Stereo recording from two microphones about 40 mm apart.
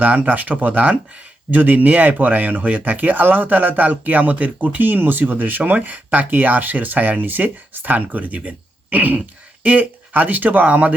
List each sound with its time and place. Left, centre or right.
0.0 s speech: right